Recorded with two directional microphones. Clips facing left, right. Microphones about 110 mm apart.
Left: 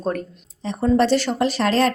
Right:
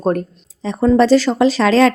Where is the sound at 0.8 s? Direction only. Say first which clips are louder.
Right 6 dB; 90° right.